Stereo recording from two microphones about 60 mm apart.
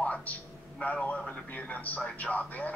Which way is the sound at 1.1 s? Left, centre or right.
Centre.